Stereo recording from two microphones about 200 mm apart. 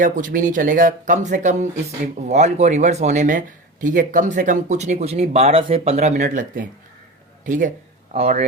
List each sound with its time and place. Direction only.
0.0 s speech: 40° right (ahead or behind)